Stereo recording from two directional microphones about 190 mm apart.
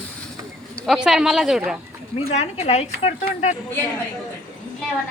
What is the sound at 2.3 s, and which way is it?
A woman's voice, 35° left (ahead or behind).